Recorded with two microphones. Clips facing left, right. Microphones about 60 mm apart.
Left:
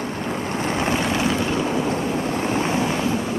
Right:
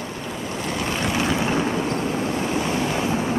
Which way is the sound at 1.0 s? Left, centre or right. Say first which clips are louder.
Left 1 dB; centre.